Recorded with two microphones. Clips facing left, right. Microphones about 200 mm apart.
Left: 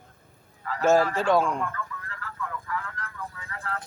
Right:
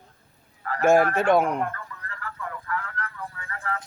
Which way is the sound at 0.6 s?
60° right (ahead or behind).